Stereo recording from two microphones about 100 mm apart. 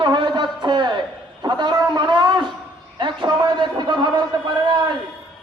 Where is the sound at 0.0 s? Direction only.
50° right (ahead or behind).